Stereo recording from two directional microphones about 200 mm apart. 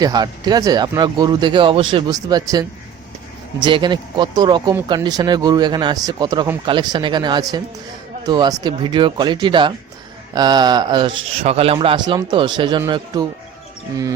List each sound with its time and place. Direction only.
0.0 s speech: 20° right (ahead or behind)